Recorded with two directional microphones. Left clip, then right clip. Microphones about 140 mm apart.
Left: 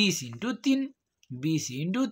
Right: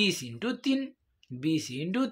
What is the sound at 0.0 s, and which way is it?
Speech, 40° left (ahead or behind).